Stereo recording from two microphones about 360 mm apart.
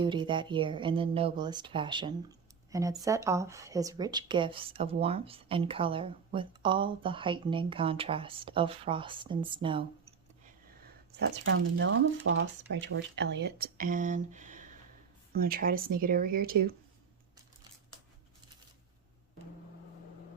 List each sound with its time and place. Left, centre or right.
0.0 s speech: centre
11.1 s speech: right